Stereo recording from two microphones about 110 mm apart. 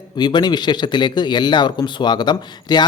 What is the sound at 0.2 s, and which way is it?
Speech, 40° left (ahead or behind).